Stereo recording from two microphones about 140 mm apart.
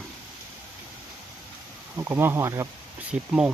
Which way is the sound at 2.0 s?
20° right (ahead or behind).